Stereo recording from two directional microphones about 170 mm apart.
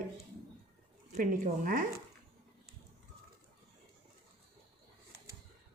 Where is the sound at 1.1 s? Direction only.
50° right (ahead or behind).